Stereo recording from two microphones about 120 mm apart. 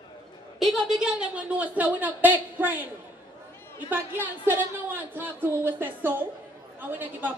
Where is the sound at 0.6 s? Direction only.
5° right (ahead or behind).